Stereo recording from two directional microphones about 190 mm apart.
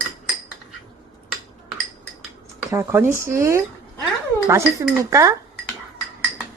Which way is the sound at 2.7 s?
10° right (ahead or behind).